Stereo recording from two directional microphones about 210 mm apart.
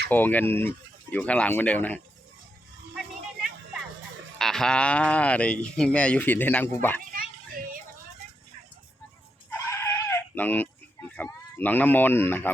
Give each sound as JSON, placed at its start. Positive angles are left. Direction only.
{"t": 0.1, "sound": "speech", "side_deg": 10}
{"t": 4.4, "sound": "speech", "side_deg": 0}
{"t": 7.1, "sound": "children playing", "side_deg": -40}
{"t": 9.5, "sound": "goat", "side_deg": 10}
{"t": 11.1, "sound": "speech", "side_deg": 10}